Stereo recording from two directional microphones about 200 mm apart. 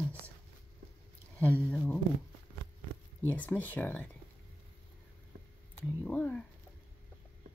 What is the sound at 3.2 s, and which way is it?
Speech, 10° left (ahead or behind).